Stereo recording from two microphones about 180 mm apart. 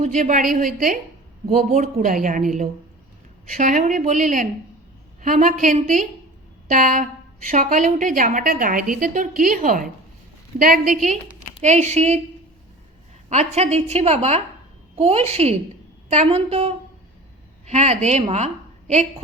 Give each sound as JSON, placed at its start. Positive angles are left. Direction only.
{"t": 0.0, "sound": "a woman's voice", "side_deg": -45}
{"t": 13.3, "sound": "a woman's voice", "side_deg": -35}